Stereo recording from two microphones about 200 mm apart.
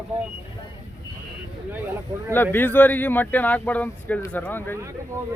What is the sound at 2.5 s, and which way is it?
Speech, 10° left (ahead or behind).